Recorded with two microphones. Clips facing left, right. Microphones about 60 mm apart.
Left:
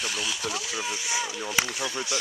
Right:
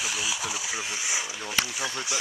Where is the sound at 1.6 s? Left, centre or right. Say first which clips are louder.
Left 2 dB; centre.